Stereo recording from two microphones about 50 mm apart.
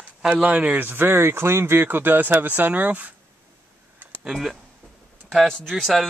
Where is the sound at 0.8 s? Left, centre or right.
Right.